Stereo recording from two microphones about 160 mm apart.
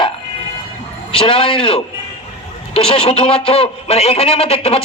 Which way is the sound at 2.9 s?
35° left (ahead or behind).